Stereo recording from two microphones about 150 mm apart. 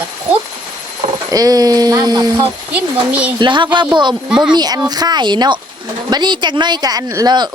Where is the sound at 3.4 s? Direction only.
30° right (ahead or behind).